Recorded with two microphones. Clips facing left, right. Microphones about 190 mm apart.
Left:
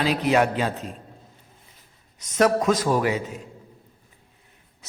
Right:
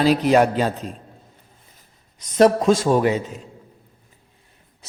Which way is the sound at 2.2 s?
30° right (ahead or behind).